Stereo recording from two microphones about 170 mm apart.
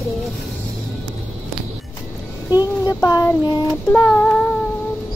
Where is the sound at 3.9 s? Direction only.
5° left (ahead or behind).